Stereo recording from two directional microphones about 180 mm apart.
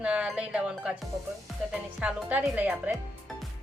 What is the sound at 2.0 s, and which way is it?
Speech, 5° right (ahead or behind).